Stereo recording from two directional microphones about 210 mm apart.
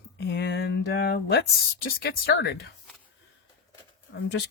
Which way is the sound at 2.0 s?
50° left (ahead or behind).